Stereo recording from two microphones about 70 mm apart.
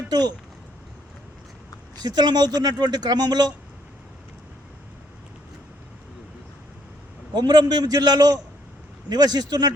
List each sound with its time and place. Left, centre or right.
0.1 s speech: right
2.0 s a man's voice: right
2.6 s a man's voice: right
7.3 s a man's voice: right